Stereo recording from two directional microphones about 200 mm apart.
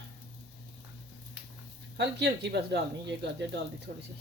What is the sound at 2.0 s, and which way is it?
Speech, 60° right (ahead or behind).